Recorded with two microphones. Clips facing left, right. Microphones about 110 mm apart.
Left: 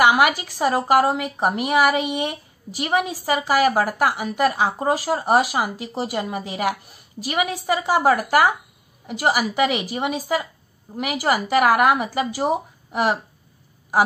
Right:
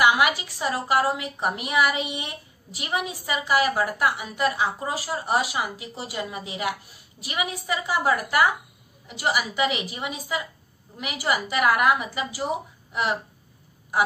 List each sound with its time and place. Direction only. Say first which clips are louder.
0.0 s a sound: left 4 dB; 55° left (ahead or behind)
0.5 s a woman's voice: left 6 dB; 60° left (ahead or behind)
9.0 s a woman's voice: left 5 dB; 50° left (ahead or behind)